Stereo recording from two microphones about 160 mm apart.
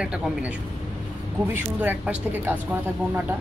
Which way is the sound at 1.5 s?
10° right (ahead or behind).